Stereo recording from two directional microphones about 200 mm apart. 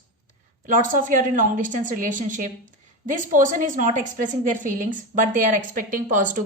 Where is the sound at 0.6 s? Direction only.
40° right (ahead or behind).